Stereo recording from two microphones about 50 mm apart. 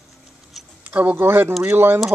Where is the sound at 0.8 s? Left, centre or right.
Right.